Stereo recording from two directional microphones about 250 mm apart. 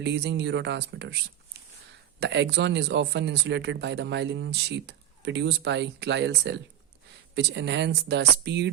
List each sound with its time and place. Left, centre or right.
0.0 s speech: right
2.2 s speech: right